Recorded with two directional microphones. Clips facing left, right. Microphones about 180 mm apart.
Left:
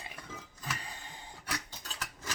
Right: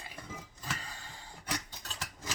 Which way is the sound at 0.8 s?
20° left (ahead or behind).